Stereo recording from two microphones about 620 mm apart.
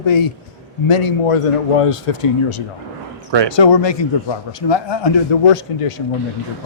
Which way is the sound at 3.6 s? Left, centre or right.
Left.